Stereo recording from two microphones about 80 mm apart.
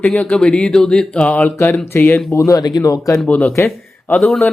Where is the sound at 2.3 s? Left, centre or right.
Left.